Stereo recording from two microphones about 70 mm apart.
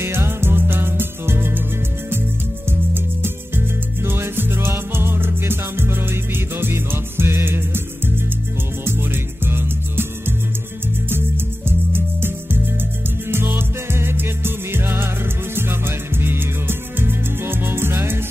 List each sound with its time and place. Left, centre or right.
0.0 s music: right
2.9 s music: right
8.8 s music: right
13.3 s music: right